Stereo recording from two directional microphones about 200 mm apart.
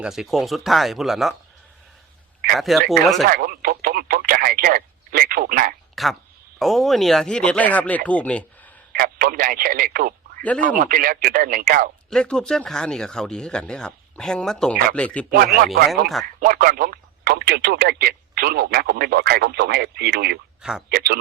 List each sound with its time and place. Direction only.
0.0 s speech: centre (ahead or behind)
2.6 s speech: centre (ahead or behind)
3.2 s radio: 45° right (ahead or behind)
6.0 s speech: centre (ahead or behind)
8.9 s speech: 50° right (ahead or behind)
12.1 s speech: 5° left (ahead or behind)
16.4 s speech: 40° right (ahead or behind)
20.6 s speech: 5° right (ahead or behind)
20.9 s speech: 50° right (ahead or behind)